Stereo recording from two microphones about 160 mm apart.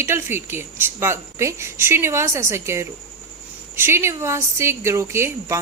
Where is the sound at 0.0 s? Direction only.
15° right (ahead or behind).